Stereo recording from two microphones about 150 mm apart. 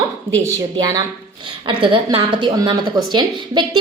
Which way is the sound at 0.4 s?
25° right (ahead or behind).